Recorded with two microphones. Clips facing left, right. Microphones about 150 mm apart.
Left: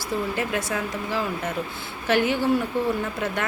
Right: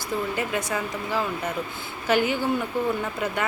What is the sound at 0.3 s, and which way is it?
A woman's voice, centre (ahead or behind).